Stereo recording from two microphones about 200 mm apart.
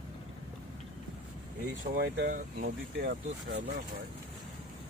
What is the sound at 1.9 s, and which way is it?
Speech, 50° right (ahead or behind).